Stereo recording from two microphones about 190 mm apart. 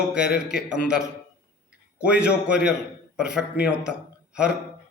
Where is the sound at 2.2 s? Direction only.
5° right (ahead or behind).